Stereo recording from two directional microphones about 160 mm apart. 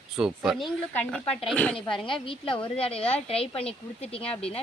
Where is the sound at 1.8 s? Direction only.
30° left (ahead or behind).